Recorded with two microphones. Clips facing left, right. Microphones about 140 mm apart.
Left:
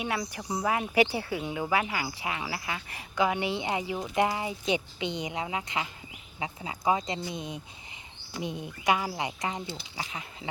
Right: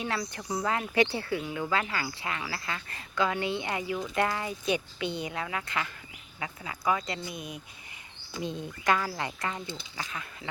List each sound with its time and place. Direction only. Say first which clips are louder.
0.0 s speech: left 1 dB; 15° left (ahead or behind)